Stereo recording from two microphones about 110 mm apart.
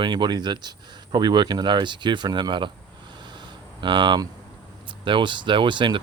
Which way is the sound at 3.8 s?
45° right (ahead or behind).